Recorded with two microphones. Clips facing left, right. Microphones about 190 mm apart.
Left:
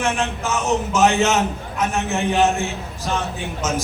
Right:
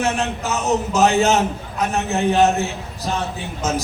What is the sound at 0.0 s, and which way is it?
A man's voice, 35° right (ahead or behind).